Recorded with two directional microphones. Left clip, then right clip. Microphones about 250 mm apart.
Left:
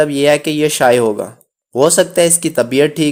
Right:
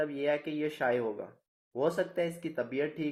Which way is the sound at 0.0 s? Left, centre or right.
Left.